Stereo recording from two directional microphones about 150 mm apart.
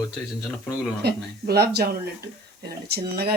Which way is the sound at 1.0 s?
90° right.